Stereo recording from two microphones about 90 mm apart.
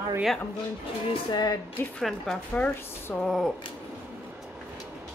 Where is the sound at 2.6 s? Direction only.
15° left (ahead or behind).